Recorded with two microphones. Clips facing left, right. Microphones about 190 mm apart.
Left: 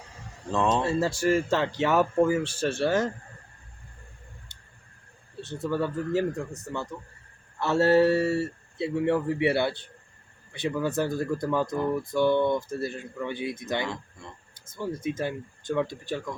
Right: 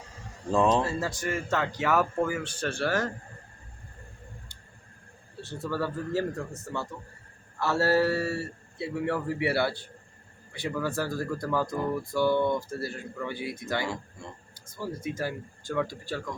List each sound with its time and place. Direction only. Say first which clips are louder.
0.8 s speech: left 4 dB; 25° left (ahead or behind)
5.4 s speech: left 3 dB; 20° left (ahead or behind)